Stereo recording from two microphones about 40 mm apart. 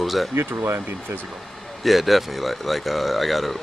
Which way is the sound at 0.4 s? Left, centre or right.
Right.